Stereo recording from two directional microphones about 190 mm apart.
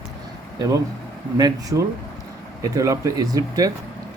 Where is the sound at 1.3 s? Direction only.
20° right (ahead or behind).